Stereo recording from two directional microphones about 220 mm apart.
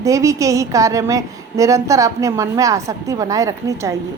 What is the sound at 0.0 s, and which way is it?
A woman's voice, 15° right (ahead or behind).